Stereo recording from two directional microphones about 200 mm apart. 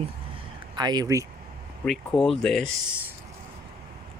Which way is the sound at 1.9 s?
5° left (ahead or behind).